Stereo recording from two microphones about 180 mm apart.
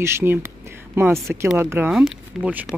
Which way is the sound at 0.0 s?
15° right (ahead or behind).